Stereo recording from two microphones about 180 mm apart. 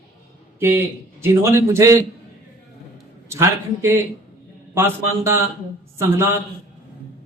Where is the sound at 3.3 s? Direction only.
15° right (ahead or behind).